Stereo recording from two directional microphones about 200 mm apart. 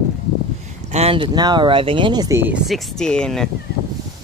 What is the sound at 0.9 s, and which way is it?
Speech, 30° right (ahead or behind).